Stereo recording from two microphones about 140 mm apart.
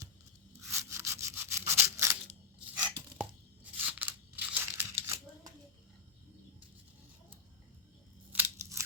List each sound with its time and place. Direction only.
0.7 s rub: 20° right (ahead or behind)
3.2 s crunch: 10° right (ahead or behind)
8.3 s scissors: 15° right (ahead or behind)